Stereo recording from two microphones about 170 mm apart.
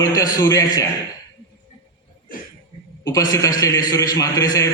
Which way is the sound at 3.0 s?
20° left (ahead or behind).